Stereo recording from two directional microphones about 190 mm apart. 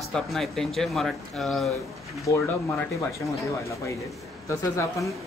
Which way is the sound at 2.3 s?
15° left (ahead or behind).